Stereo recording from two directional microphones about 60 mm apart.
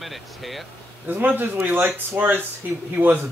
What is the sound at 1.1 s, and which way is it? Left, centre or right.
Speech, right.